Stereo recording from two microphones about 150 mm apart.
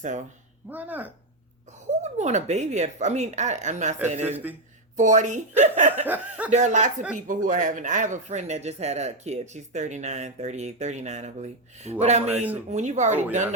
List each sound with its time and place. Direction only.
0.0 s speech: 55° right (ahead or behind)
0.7 s speech: 10° right (ahead or behind)
2.0 s speech: 50° right (ahead or behind)
4.3 s speech: 10° right (ahead or behind)
4.9 s a woman's voice: 55° right (ahead or behind)
6.1 s speech: 10° right (ahead or behind)
6.5 s speech: 50° right (ahead or behind)
12.3 s speech: 10° right (ahead or behind)
12.7 s speech: 50° right (ahead or behind)